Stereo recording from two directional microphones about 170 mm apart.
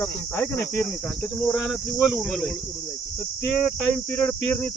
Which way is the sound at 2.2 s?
Centre (ahead or behind).